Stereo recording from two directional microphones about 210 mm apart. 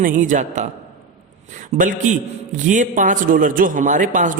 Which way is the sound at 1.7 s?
35° right (ahead or behind).